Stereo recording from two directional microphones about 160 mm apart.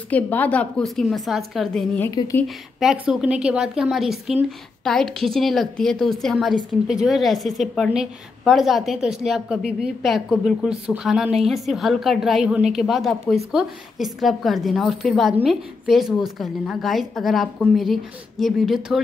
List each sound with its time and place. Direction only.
0.1 s a woman's voice: 10° left (ahead or behind)